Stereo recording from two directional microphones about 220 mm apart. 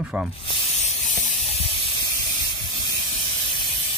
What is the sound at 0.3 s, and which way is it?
Sanding, 25° left (ahead or behind).